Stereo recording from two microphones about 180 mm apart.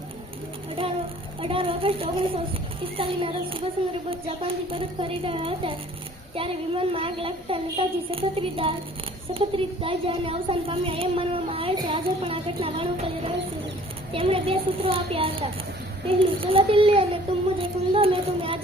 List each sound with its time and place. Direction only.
1.4 s speech: 30° right (ahead or behind)